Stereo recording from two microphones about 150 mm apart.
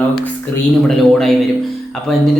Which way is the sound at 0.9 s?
Centre (ahead or behind).